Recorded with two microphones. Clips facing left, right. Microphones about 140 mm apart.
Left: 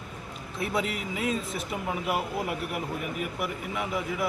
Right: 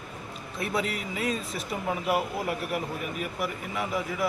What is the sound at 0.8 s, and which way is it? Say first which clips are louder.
Speech: left 1 dB; 20° left (ahead or behind).